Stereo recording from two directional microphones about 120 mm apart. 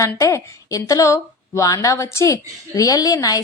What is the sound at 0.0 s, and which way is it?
A woman's voice, 25° left (ahead or behind).